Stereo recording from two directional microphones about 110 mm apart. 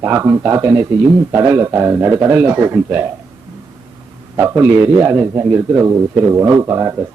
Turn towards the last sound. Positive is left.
turn(degrees=-25)  # may be behind; listen again after turning